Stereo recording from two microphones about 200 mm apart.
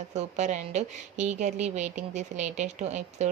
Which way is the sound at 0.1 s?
35° right (ahead or behind).